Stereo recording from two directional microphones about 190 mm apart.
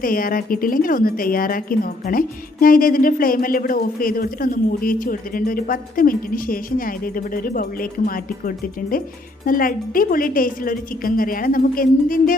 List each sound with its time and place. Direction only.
0.0 s a woman's voice: 50° left (ahead or behind)